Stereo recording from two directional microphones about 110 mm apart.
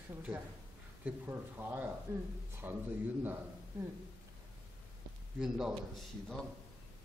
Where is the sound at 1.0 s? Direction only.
15° right (ahead or behind).